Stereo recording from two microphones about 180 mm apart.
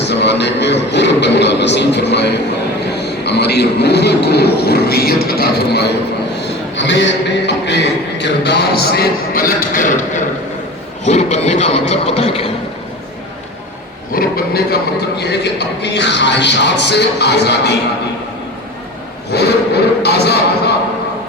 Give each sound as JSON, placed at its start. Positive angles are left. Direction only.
{"t": 0.0, "sound": "a man's voice", "side_deg": 70}
{"t": 6.7, "sound": "a man's voice", "side_deg": 90}
{"t": 11.0, "sound": "speech", "side_deg": 40}
{"t": 14.1, "sound": "a man's voice", "side_deg": 55}
{"t": 19.3, "sound": "a sound", "side_deg": 65}